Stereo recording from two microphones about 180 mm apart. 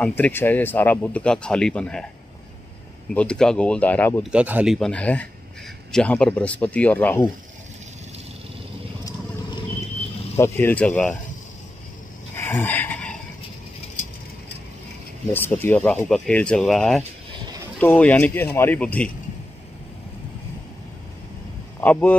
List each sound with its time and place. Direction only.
0.0 s speech: 10° left (ahead or behind)
3.2 s speech: 5° left (ahead or behind)
4.2 s speech: 5° right (ahead or behind)
4.7 s speech: 5° left (ahead or behind)
9.0 s vehicle: 25° left (ahead or behind)
10.3 s speech: 10° left (ahead or behind)
12.4 s a sound: 10° left (ahead or behind)
15.3 s speech: 10° left (ahead or behind)